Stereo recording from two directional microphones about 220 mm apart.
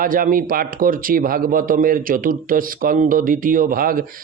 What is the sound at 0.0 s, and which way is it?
A man's voice, 40° right (ahead or behind).